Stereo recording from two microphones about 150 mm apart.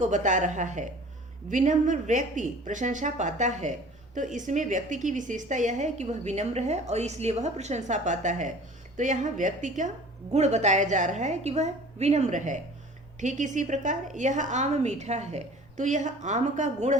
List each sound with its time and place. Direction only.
0.0 s a woman's voice: 55° right (ahead or behind)